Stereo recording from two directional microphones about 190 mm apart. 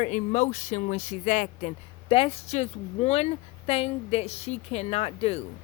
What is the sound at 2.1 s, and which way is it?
Speech, 30° left (ahead or behind).